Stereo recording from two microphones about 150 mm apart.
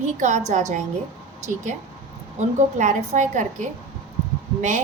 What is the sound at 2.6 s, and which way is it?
A woman's voice, 55° right (ahead or behind).